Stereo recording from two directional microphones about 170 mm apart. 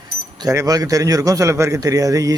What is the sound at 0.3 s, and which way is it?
A man's voice, 20° right (ahead or behind).